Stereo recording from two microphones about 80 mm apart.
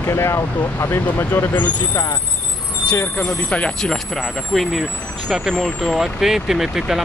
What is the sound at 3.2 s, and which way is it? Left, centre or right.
Speech, centre.